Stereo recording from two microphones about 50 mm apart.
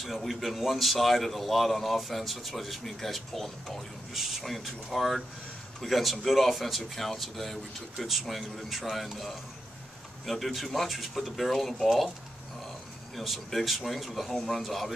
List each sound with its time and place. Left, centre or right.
0.0 s speech: centre
4.1 s speech: centre
13.1 s speech: centre